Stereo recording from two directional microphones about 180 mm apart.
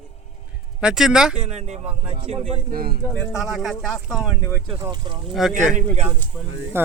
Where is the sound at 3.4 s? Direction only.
Centre (ahead or behind).